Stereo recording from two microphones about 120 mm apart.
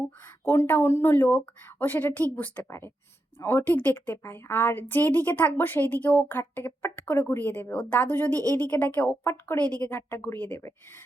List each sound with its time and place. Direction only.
0.4 s a woman's voice: 20° left (ahead or behind)